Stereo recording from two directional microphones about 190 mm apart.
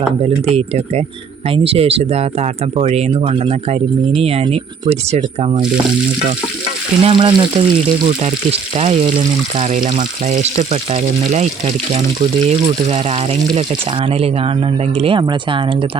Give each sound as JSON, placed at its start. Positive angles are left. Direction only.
{"t": 0.5, "sound": "speech", "side_deg": -35}
{"t": 7.0, "sound": "frying", "side_deg": -25}
{"t": 8.7, "sound": "speech", "side_deg": -30}
{"t": 14.9, "sound": "frying", "side_deg": -30}